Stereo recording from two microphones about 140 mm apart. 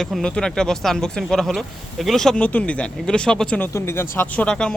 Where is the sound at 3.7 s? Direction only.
15° left (ahead or behind).